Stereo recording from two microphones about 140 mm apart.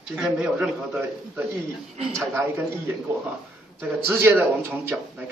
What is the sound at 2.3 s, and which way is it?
Speech, 15° right (ahead or behind).